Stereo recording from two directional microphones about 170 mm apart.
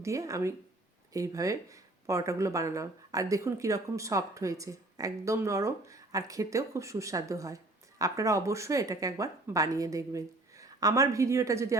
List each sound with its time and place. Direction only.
0.0 s speech: 20° right (ahead or behind)